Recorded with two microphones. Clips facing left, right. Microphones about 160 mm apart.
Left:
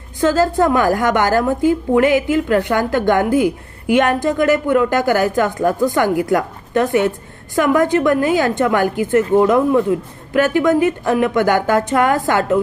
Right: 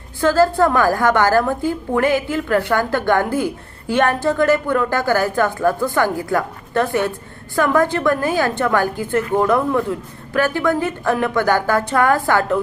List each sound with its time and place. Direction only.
0.2 s a woman's voice: 20° left (ahead or behind)